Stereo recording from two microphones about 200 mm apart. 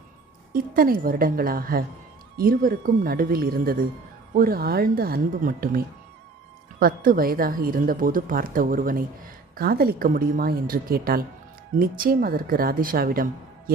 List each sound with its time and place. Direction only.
0.5 s a woman's voice: 45° right (ahead or behind)